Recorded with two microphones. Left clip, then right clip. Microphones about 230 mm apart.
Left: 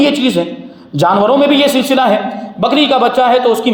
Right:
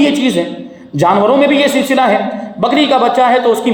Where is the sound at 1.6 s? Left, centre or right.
Left.